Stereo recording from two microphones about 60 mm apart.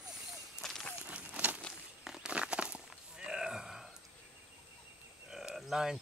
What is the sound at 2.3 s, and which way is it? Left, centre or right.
Walk, centre.